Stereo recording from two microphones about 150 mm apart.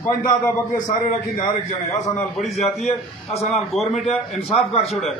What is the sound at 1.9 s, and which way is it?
A man's voice, centre (ahead or behind).